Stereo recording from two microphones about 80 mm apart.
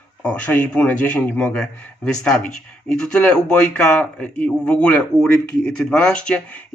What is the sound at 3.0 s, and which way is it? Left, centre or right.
Speech, centre.